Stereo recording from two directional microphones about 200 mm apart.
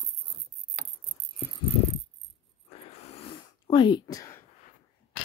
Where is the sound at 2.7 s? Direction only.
30° left (ahead or behind).